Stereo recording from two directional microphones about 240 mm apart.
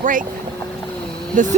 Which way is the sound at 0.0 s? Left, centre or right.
Right.